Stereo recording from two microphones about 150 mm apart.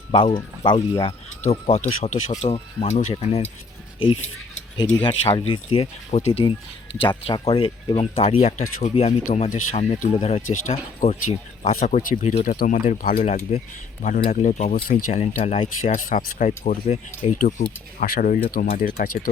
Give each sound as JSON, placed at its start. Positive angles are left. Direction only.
{"t": 0.1, "sound": "speech", "side_deg": 30}
{"t": 1.5, "sound": "speech", "side_deg": 45}
{"t": 5.0, "sound": "speech", "side_deg": 40}
{"t": 12.5, "sound": "speech", "side_deg": 60}
{"t": 14.2, "sound": "speech", "side_deg": 50}
{"t": 15.2, "sound": "speech", "side_deg": 50}
{"t": 16.0, "sound": "speech", "side_deg": 65}